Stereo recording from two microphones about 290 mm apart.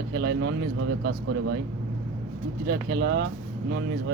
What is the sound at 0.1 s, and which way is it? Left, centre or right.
Speech, right.